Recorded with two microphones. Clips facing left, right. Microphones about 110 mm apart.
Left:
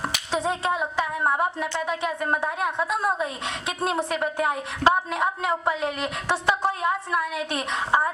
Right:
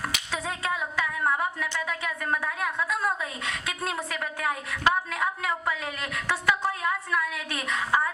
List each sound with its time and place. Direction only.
0.3 s a woman's voice: 25° left (ahead or behind)